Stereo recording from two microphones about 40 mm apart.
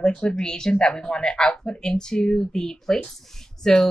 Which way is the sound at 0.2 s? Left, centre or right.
Left.